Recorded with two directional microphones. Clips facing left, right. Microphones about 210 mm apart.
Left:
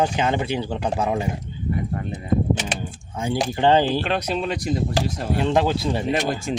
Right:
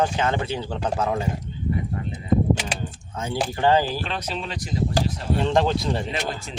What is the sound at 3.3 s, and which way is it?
Speech, 20° left (ahead or behind).